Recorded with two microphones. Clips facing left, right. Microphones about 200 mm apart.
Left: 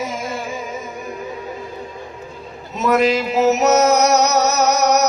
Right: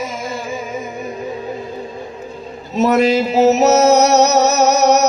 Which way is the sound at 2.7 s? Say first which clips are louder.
Right 3 dB; 30° right (ahead or behind).